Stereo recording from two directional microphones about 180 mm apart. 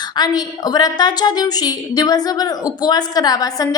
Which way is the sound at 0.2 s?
20° left (ahead or behind).